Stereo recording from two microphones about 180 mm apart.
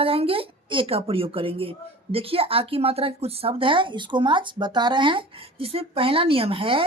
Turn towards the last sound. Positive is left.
turn(degrees=-30)  # may be behind; listen again after turning